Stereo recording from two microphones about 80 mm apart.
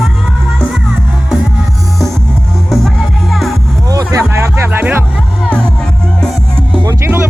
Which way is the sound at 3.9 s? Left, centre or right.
Right.